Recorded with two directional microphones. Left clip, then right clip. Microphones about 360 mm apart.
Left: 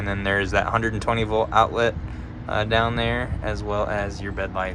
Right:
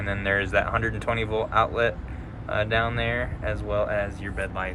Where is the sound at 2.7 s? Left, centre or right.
Centre.